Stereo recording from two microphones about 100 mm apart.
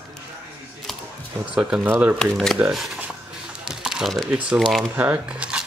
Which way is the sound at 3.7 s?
5° right (ahead or behind).